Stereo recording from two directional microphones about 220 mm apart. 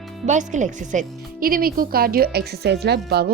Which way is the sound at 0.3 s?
35° right (ahead or behind).